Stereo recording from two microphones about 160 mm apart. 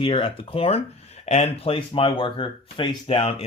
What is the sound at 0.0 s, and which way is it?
Speech, 35° left (ahead or behind).